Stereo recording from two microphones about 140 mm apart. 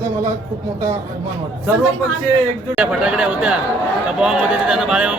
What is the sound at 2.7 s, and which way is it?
A man's voice, 5° right (ahead or behind).